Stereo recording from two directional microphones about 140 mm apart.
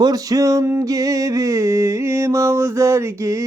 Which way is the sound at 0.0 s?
25° right (ahead or behind).